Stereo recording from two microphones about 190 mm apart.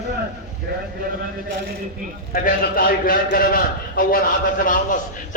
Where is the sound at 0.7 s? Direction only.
60° right (ahead or behind).